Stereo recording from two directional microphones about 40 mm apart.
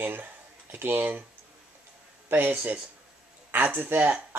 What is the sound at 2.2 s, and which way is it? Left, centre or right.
Speech, right.